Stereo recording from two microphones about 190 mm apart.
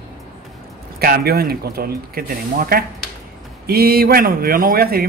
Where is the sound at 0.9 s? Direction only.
55° right (ahead or behind).